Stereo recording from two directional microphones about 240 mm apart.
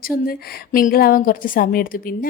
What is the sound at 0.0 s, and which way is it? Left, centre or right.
A woman's voice, left.